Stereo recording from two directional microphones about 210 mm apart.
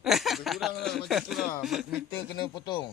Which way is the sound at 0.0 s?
Centre (ahead or behind).